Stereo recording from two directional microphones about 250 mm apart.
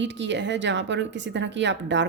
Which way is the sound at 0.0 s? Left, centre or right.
Right.